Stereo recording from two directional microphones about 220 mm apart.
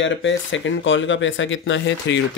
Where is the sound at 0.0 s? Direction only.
55° left (ahead or behind).